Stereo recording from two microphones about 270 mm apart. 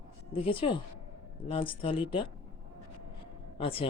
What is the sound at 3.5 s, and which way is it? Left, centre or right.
Speech, left.